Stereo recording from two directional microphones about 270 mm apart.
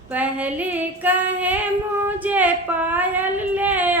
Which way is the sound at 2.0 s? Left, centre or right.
Centre.